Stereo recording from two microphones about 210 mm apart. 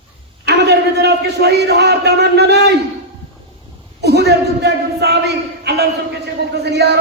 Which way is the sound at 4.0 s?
50° right (ahead or behind).